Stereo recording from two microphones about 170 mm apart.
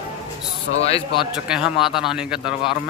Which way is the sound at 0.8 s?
30° left (ahead or behind).